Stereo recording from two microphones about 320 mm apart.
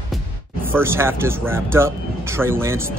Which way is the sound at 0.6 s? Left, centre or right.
Centre.